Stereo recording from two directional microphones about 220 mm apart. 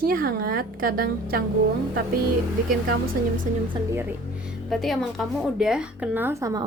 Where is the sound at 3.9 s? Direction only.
10° right (ahead or behind).